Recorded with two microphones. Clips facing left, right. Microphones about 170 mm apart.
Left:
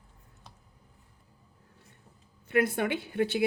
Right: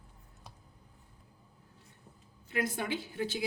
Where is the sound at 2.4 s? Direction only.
60° left (ahead or behind).